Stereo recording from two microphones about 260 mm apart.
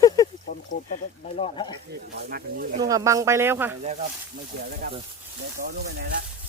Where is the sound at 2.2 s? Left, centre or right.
Right.